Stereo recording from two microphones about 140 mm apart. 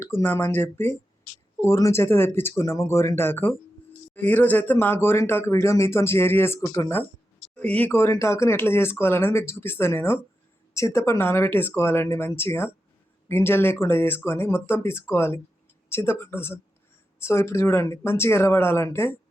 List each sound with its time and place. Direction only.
0.0 s speech: 15° left (ahead or behind)
7.5 s speech: 10° left (ahead or behind)